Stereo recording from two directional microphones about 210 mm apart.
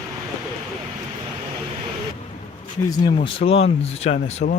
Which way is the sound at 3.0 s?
25° left (ahead or behind).